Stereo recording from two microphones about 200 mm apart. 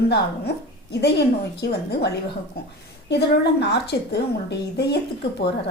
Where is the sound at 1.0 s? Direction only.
55° left (ahead or behind).